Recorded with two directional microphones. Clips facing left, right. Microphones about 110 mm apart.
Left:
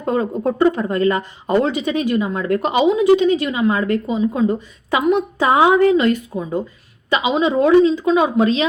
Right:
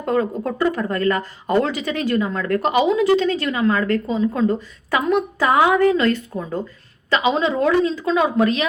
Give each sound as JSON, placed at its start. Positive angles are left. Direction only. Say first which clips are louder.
{"t": 0.0, "sound": "speech", "louder": "left 2 dB", "side_deg": 20}